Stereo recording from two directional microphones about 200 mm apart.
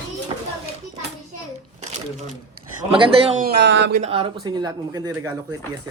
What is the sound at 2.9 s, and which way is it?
Speech, 30° right (ahead or behind).